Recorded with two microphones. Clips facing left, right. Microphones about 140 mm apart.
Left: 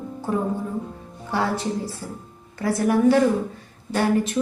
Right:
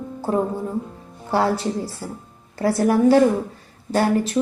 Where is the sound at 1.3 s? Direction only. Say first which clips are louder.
Right 4 dB; 35° right (ahead or behind).